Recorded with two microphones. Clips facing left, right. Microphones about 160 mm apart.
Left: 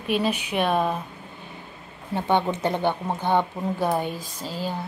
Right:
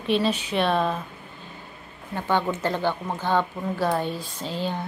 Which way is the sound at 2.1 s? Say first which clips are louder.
Left 2 dB; 20° left (ahead or behind).